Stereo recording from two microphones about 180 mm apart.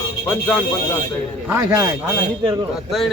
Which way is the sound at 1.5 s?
15° right (ahead or behind).